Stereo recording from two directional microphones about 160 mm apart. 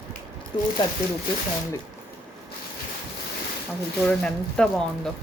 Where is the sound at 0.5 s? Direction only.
30° left (ahead or behind).